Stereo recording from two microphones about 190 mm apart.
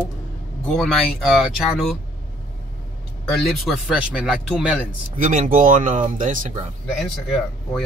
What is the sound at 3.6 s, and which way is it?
Speech, 5° right (ahead or behind).